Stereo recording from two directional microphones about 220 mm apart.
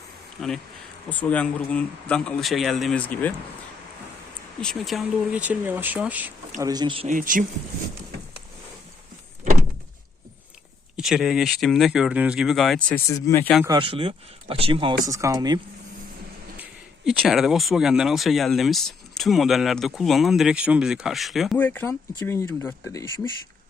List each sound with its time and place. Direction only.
0.4 s speech: 5° left (ahead or behind)
4.6 s speech: centre (ahead or behind)
6.6 s speech: 15° right (ahead or behind)
7.2 s speech: 40° right (ahead or behind)
10.9 s speech: centre (ahead or behind)
13.1 s speech: 15° left (ahead or behind)
13.7 s speech: 20° right (ahead or behind)
17.1 s speech: centre (ahead or behind)